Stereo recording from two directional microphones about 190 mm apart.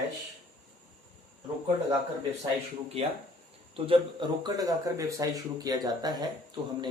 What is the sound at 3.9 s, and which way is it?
Speech, 25° right (ahead or behind).